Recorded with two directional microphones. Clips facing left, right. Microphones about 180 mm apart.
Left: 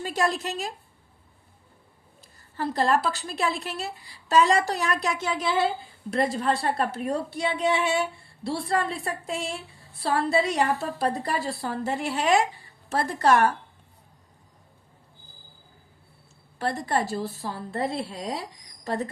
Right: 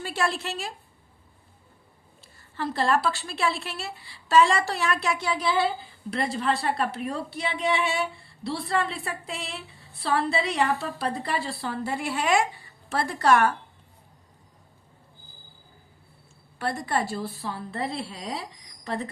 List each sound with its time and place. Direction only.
0.0 s a woman's voice: 40° left (ahead or behind)
2.6 s a woman's voice: 40° left (ahead or behind)
7.3 s a sound: centre (ahead or behind)
8.4 s a woman's voice: 45° left (ahead or behind)
16.8 s a woman's voice: 40° left (ahead or behind)